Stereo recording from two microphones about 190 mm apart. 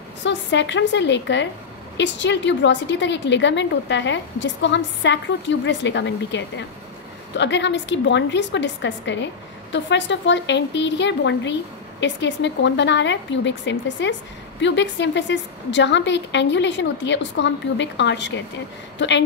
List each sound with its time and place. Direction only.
0.2 s a woman's voice: 70° left (ahead or behind)